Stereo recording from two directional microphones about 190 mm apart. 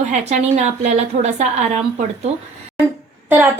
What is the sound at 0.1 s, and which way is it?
A woman's voice, 35° right (ahead or behind).